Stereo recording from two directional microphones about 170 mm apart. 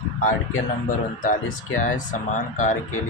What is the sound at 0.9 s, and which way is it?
Speech, 50° left (ahead or behind).